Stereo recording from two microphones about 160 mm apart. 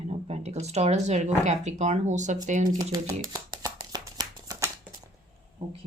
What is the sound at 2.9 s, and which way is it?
Shuffling cards, 25° right (ahead or behind).